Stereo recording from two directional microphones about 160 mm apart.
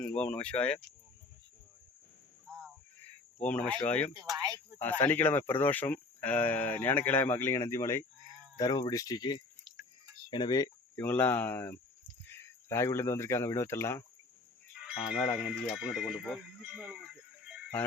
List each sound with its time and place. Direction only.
0.2 s speech: 5° left (ahead or behind)
3.4 s speech: 10° left (ahead or behind)
4.1 s speech: 25° right (ahead or behind)
4.8 s speech: 10° left (ahead or behind)
10.9 s speech: 10° left (ahead or behind)
14.8 s speech: 5° right (ahead or behind)